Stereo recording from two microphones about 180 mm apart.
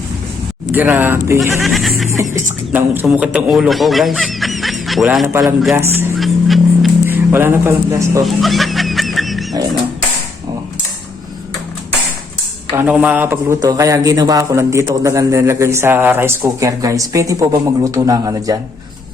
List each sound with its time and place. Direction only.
0.7 s speech: 10° right (ahead or behind)
1.6 s music: centre (ahead or behind)
2.7 s a sound: 10° right (ahead or behind)
5.2 s speech: 15° right (ahead or behind)
6.1 s music: centre (ahead or behind)
7.1 s speech: 10° right (ahead or behind)
8.2 s wild animals: centre (ahead or behind)
12.7 s speech: 10° right (ahead or behind)